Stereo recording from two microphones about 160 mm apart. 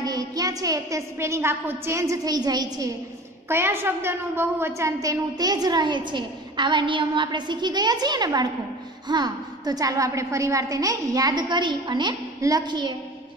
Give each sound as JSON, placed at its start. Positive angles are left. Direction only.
{"t": 0.0, "sound": "a woman's voice", "side_deg": -25}